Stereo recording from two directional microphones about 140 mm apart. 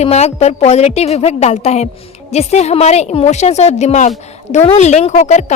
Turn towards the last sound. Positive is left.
turn(degrees=55)  # may be behind; listen again after turning